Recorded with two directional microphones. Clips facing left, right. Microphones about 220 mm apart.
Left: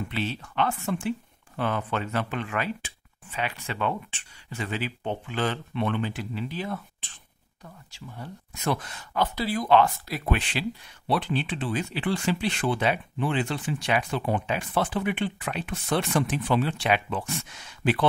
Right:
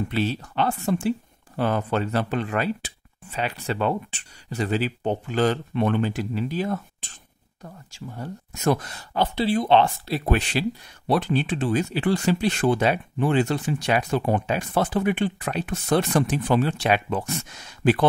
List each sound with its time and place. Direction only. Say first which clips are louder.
0.1 s speech: right 6 dB; 40° right (ahead or behind)